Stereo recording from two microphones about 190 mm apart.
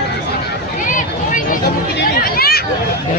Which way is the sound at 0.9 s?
45° left (ahead or behind).